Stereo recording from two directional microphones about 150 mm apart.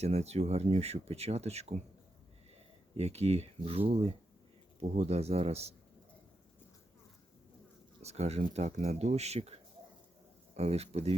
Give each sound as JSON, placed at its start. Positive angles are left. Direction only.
{"t": 0.0, "sound": "speech", "side_deg": -45}
{"t": 3.0, "sound": "speech", "side_deg": -45}
{"t": 8.0, "sound": "speech", "side_deg": -45}